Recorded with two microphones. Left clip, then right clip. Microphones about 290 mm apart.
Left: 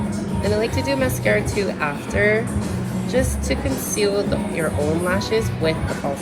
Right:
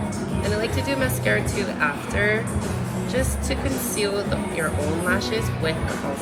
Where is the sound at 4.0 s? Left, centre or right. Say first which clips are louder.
Left 5 dB; centre.